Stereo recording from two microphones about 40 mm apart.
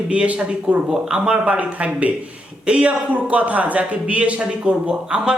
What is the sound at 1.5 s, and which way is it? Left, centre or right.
A man's voice, right.